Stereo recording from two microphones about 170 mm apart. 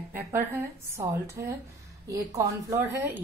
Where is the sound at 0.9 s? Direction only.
15° right (ahead or behind).